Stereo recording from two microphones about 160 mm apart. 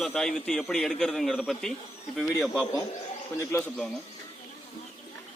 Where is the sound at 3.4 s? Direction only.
15° left (ahead or behind).